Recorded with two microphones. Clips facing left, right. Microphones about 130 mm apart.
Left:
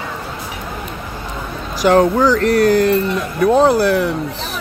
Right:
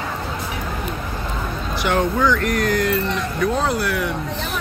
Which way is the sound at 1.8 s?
35° left (ahead or behind).